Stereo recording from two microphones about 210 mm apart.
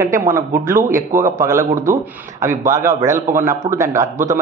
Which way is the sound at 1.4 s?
15° right (ahead or behind).